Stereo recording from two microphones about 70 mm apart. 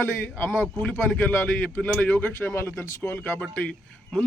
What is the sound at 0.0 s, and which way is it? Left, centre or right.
A man's voice, left.